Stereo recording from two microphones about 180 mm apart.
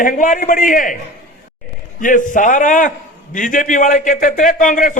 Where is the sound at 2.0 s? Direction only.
45° left (ahead or behind).